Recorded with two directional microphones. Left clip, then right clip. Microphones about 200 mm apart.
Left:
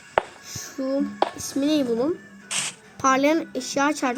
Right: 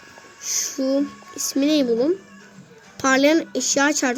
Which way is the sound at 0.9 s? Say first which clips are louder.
Left 1 dB; 5° right (ahead or behind).